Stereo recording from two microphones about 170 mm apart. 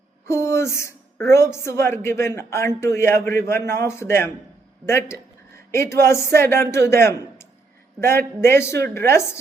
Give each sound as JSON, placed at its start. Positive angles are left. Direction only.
{"t": 0.3, "sound": "a woman's voice", "side_deg": 15}